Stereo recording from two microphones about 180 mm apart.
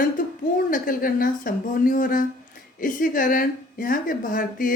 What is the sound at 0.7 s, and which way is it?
Speech, 50° left (ahead or behind).